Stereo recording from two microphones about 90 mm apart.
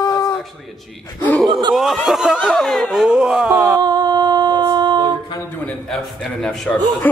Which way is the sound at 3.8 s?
50° right (ahead or behind).